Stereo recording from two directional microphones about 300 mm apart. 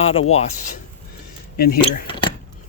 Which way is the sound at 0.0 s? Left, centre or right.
Centre.